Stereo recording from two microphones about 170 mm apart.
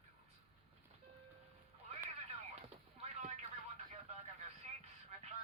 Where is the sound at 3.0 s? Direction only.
40° right (ahead or behind).